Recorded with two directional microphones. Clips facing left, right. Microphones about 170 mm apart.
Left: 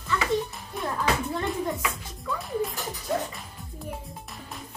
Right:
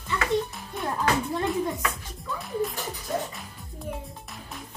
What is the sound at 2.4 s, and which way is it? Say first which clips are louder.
Music: right 1 dB; centre (ahead or behind).